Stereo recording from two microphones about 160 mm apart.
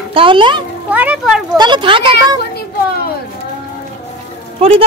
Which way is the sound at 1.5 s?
25° right (ahead or behind).